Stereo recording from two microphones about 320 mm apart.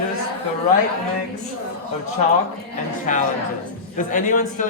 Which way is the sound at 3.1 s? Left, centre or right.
Left.